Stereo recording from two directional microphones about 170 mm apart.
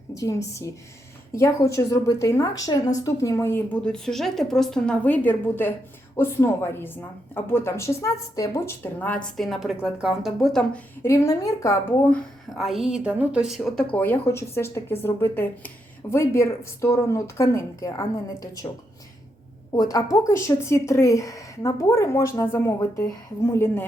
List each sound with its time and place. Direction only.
0.1 s a woman's voice: 20° left (ahead or behind)
12.1 s a woman's voice: centre (ahead or behind); by 18.7 s 20° left (ahead or behind)
19.7 s a woman's voice: 20° left (ahead or behind)